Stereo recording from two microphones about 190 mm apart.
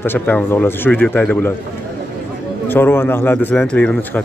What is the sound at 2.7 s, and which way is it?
Speech, 10° left (ahead or behind).